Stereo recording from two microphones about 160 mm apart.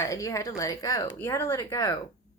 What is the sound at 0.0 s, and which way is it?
Speech, 20° left (ahead or behind).